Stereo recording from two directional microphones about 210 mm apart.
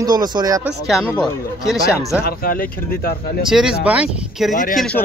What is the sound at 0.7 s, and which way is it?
Speech, centre (ahead or behind).